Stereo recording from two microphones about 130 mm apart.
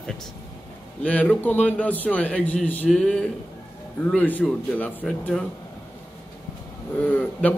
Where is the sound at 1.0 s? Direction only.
10° left (ahead or behind).